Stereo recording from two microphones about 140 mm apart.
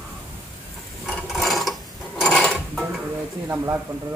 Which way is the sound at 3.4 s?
15° right (ahead or behind).